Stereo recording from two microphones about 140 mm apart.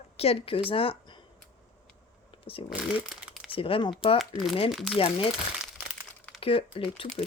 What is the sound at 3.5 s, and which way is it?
Speech, 40° left (ahead or behind).